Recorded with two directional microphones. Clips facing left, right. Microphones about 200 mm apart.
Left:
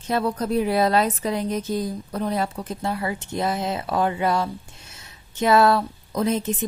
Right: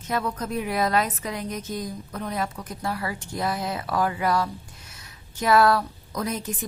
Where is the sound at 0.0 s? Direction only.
30° left (ahead or behind).